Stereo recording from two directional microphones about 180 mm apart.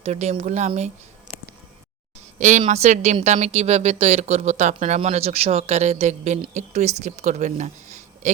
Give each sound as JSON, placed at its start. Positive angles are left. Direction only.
{"t": 0.0, "sound": "a woman's voice", "side_deg": -35}
{"t": 2.4, "sound": "a woman's voice", "side_deg": -40}